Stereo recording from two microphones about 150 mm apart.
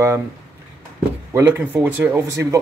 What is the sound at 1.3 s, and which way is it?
Speech, 15° right (ahead or behind).